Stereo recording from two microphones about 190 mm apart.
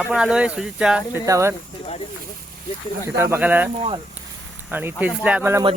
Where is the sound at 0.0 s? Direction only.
5° right (ahead or behind).